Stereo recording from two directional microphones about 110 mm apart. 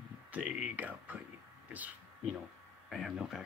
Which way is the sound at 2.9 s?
5° right (ahead or behind).